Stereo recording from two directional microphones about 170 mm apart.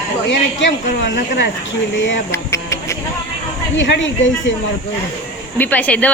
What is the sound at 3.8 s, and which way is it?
Speech, 90° left.